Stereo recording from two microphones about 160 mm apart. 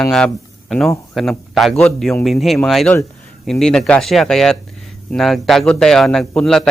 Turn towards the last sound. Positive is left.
turn(degrees=5)  # may be behind; listen again after turning